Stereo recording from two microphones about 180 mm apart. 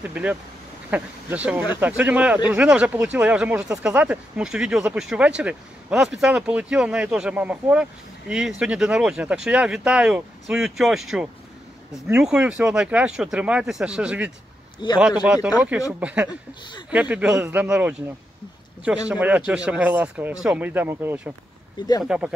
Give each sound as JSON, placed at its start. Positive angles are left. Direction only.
{"t": 0.0, "sound": "speech", "side_deg": -10}
{"t": 16.3, "sound": "speech", "side_deg": 25}
{"t": 16.9, "sound": "speech", "side_deg": -10}
{"t": 19.0, "sound": "speech", "side_deg": -10}